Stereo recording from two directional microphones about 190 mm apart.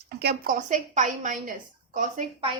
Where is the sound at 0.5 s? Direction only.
40° right (ahead or behind).